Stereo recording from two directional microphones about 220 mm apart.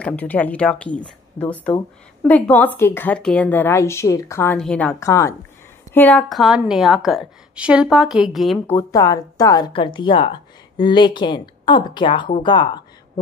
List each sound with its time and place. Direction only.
0.0 s a woman's voice: 5° left (ahead or behind)
8.7 s a woman's voice: 15° left (ahead or behind)